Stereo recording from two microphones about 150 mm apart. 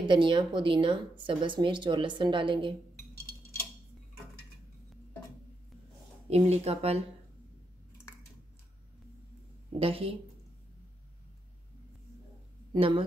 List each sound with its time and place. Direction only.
0.0 s speech: 30° right (ahead or behind)
6.5 s speech: 45° right (ahead or behind)
9.8 s speech: 40° right (ahead or behind)
12.7 s speech: 35° right (ahead or behind)